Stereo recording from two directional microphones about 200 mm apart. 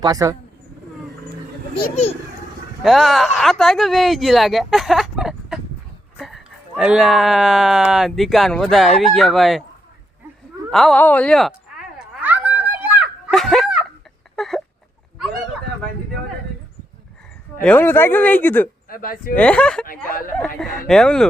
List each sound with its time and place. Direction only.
0.0 s speech: 20° right (ahead or behind)
2.8 s speech: centre (ahead or behind)
10.7 s speech: centre (ahead or behind)
12.2 s a sound: 10° right (ahead or behind)
17.6 s speech: 10° left (ahead or behind)
18.9 s speech: 45° left (ahead or behind)
19.4 s speech: 5° left (ahead or behind)
20.1 s speech: 45° left (ahead or behind)
20.4 s speech: centre (ahead or behind)